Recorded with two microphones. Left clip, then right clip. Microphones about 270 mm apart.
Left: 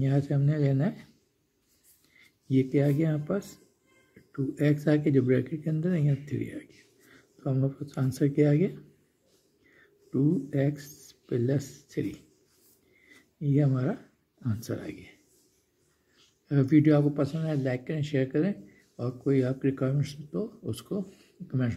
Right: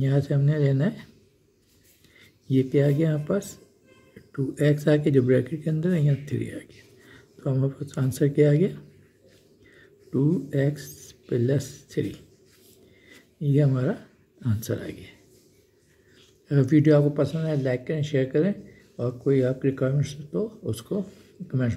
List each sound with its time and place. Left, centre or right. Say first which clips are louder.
0.0 s speech: right 3 dB; centre
2.1 s speech: right 3 dB; centre
10.1 s speech: right 3 dB; centre
13.4 s speech: right 4 dB; centre
16.2 s speech: right 4 dB; centre